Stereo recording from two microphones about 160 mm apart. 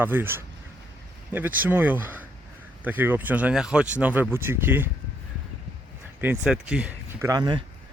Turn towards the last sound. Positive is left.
turn(degrees=-25)  # may be behind; listen again after turning